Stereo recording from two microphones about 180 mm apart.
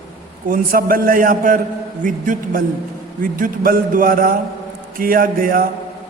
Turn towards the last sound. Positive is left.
turn(degrees=-50)  # may be behind; listen again after turning